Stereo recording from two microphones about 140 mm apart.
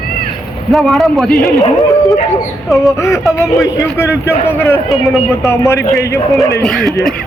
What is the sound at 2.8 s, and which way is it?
A man's voice, 20° left (ahead or behind).